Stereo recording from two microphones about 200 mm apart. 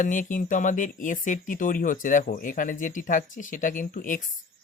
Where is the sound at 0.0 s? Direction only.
40° left (ahead or behind).